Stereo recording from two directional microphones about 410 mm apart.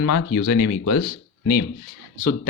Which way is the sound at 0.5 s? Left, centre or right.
Left.